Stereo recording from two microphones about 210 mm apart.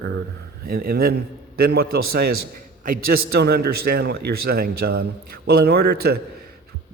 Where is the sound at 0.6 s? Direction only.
45° right (ahead or behind).